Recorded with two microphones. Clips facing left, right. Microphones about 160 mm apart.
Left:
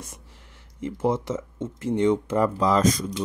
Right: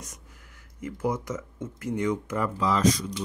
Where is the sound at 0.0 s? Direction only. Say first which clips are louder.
Left 3 dB; 30° left (ahead or behind).